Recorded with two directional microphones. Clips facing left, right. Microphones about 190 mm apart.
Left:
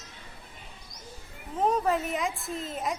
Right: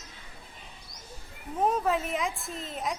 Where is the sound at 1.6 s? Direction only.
Centre (ahead or behind).